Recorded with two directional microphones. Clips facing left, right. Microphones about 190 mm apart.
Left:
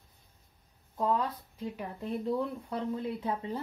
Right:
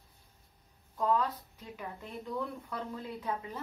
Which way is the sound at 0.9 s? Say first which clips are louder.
Even; 30° left (ahead or behind).